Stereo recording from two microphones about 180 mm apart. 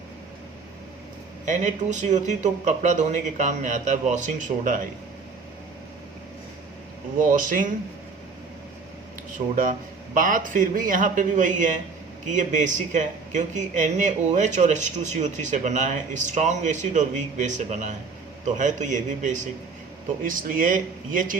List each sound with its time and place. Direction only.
1.5 s a man's voice: 40° right (ahead or behind)
7.2 s a man's voice: 50° right (ahead or behind)
10.2 s a man's voice: 50° right (ahead or behind)